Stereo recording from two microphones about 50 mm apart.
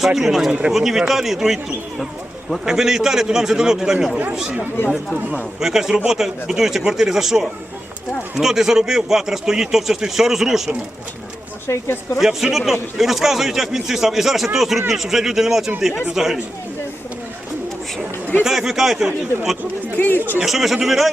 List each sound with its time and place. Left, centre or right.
0.0 s a man's voice: centre
2.6 s a man's voice: centre
5.5 s a man's voice: centre
11.6 s speech: left
12.2 s a man's voice: centre
18.4 s a man's voice: centre
20.0 s speech: left
20.4 s speech: centre